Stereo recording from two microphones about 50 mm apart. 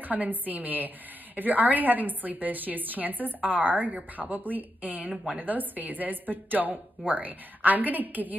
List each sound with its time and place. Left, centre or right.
0.0 s a woman's voice: right